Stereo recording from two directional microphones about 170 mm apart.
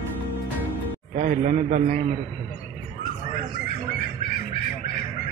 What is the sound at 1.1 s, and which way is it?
Speech, 50° right (ahead or behind).